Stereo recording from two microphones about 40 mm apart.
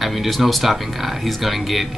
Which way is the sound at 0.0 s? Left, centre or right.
Centre.